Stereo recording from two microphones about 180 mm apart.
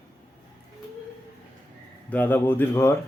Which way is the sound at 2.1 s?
10° left (ahead or behind).